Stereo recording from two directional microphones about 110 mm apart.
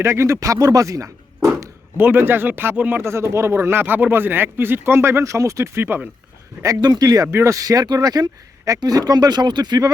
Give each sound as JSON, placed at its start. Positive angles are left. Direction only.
{"t": 0.0, "sound": "speech", "side_deg": -25}
{"t": 2.0, "sound": "speech", "side_deg": -15}
{"t": 6.6, "sound": "speech", "side_deg": -35}